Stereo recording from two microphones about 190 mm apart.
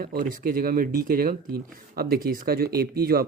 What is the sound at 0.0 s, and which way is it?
Speech, 50° right (ahead or behind).